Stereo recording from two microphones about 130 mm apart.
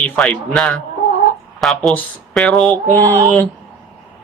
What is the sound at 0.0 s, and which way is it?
Speech, 10° left (ahead or behind).